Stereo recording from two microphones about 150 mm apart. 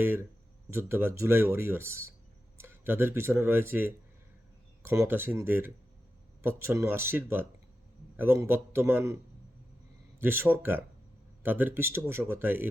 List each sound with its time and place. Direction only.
0.0 s speech: 15° right (ahead or behind)
10.2 s speech: 15° right (ahead or behind)